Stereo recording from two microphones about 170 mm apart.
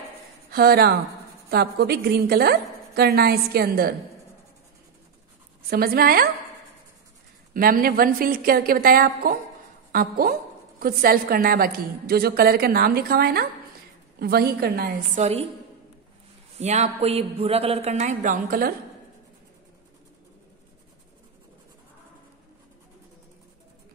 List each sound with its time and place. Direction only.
0.5 s a woman's voice: 65° right (ahead or behind)
5.7 s a woman's voice: 65° right (ahead or behind)
7.5 s a woman's voice: 55° right (ahead or behind)
15.1 s a man's voice: 35° right (ahead or behind)
16.5 s a man's voice: 40° right (ahead or behind)